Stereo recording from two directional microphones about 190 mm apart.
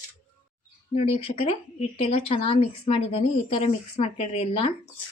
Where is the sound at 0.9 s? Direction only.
30° left (ahead or behind).